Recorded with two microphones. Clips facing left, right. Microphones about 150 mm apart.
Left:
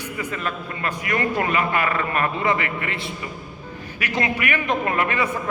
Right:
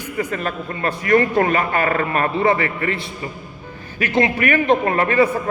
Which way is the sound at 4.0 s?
35° right (ahead or behind).